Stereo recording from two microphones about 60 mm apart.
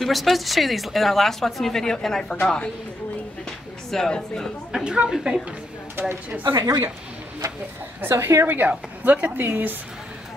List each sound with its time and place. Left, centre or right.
0.0 s a woman's voice: centre
3.9 s speech: centre
4.7 s a woman's voice: centre
5.9 s a woman's voice: right
8.0 s a woman's voice: right
8.5 s a woman's voice: right